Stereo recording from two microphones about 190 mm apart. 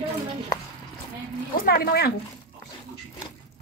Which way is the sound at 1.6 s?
55° left (ahead or behind).